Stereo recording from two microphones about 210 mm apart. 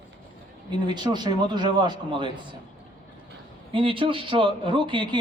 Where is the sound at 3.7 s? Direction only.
25° right (ahead or behind).